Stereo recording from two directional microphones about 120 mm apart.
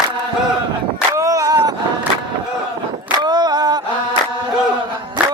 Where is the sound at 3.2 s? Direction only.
35° right (ahead or behind).